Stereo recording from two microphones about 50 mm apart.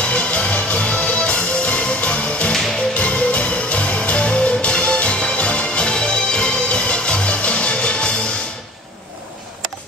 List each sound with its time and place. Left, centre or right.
0.0 s music: left